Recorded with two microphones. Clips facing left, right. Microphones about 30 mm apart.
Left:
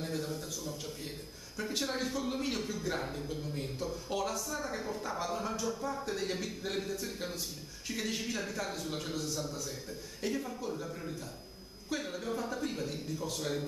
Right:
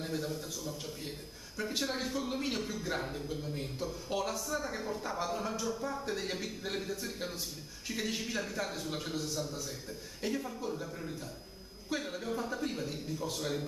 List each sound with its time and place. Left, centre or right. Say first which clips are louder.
0.0 s a man's voice: even; centre